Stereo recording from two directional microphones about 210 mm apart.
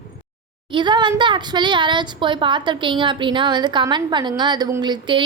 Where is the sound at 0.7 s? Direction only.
20° right (ahead or behind).